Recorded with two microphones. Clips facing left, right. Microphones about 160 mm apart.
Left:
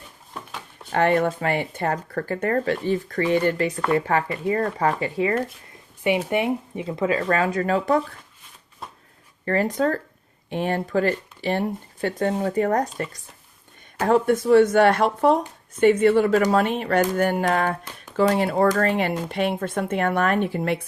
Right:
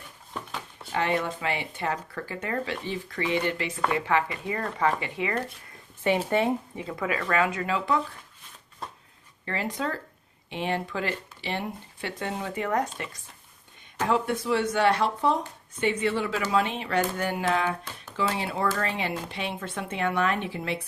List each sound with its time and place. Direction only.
0.9 s speech: 55° left (ahead or behind); by 5.4 s 35° left (ahead or behind)
6.0 s speech: 15° left (ahead or behind); by 8.0 s 45° left (ahead or behind)
9.5 s speech: 45° left (ahead or behind)
14.1 s speech: 50° left (ahead or behind)